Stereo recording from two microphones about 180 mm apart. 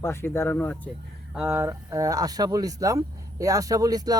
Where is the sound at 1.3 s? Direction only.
10° right (ahead or behind).